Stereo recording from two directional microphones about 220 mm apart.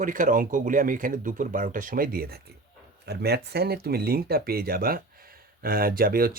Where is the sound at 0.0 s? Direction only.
40° right (ahead or behind).